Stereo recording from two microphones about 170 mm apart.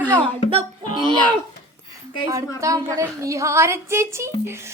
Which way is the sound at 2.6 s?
20° right (ahead or behind).